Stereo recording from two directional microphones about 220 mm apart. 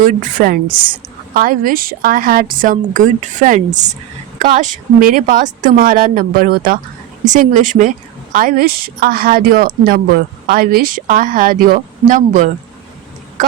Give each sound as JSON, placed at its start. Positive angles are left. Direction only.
{"t": 0.0, "sound": "a woman's voice", "side_deg": -40}